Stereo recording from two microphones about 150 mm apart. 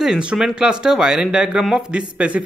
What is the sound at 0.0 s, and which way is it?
Speech, 5° right (ahead or behind).